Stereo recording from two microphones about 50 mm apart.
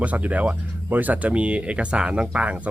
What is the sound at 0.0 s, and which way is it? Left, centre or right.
Speech, right.